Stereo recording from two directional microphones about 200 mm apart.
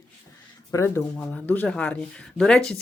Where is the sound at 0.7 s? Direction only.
15° left (ahead or behind).